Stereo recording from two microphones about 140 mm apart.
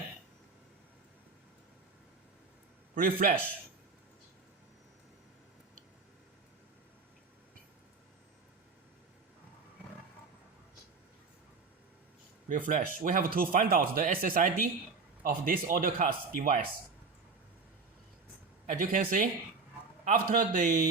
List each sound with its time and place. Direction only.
2.9 s a man's voice: 80° right
12.5 s speech: 70° right (ahead or behind)
18.6 s speech: 70° right (ahead or behind)
20.1 s speech: 80° right